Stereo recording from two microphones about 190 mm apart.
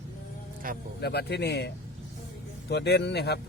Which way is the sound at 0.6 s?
45° right (ahead or behind).